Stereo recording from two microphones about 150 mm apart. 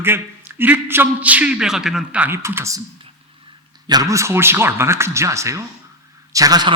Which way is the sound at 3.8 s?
25° right (ahead or behind).